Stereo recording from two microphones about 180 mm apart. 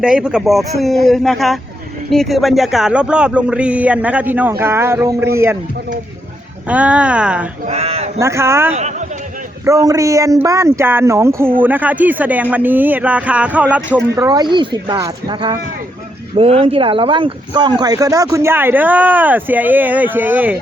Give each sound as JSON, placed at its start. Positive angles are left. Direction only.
{"t": 0.0, "sound": "speech", "side_deg": -5}
{"t": 6.7, "sound": "speech", "side_deg": -5}
{"t": 7.7, "sound": "a man's voice", "side_deg": -35}
{"t": 8.2, "sound": "speech", "side_deg": -15}
{"t": 8.7, "sound": "a man's voice", "side_deg": -40}
{"t": 9.6, "sound": "speech", "side_deg": -20}
{"t": 14.2, "sound": "speech", "side_deg": -20}